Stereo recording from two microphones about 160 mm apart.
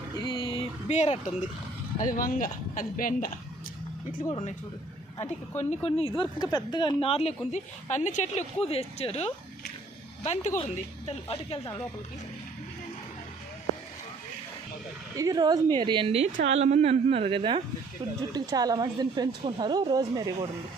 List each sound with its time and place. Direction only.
0.3 s a sound: 30° left (ahead or behind)
0.9 s speech: 45° left (ahead or behind)
2.0 s speech: 60° left (ahead or behind)
5.5 s a woman's voice: 40° left (ahead or behind)
6.4 s a woman's voice: 25° left (ahead or behind)
15.1 s a woman's voice: 20° right (ahead or behind)